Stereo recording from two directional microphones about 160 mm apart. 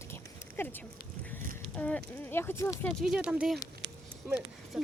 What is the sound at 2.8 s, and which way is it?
Speech, 5° right (ahead or behind).